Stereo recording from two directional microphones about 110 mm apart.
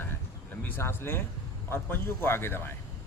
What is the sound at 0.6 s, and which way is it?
A man's voice, 20° left (ahead or behind).